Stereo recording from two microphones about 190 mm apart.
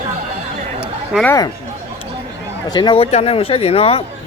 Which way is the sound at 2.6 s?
25° left (ahead or behind).